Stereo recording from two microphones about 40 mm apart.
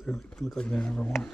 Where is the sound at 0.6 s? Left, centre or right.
Left.